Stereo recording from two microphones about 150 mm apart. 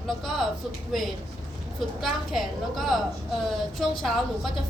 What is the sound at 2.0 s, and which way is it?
A woman's voice, centre (ahead or behind).